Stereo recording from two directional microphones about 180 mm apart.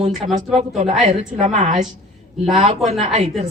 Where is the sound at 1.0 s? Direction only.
40° right (ahead or behind).